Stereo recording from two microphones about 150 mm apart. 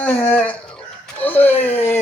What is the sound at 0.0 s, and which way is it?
Speech, 10° left (ahead or behind).